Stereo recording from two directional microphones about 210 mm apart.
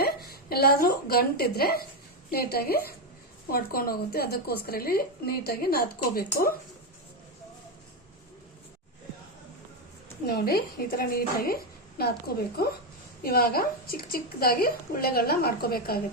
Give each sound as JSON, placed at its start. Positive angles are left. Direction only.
{"t": 0.0, "sound": "a woman's voice", "side_deg": 45}
{"t": 10.2, "sound": "a woman's voice", "side_deg": 45}